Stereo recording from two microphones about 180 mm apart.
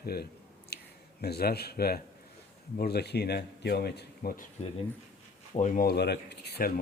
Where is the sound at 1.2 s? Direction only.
60° left (ahead or behind).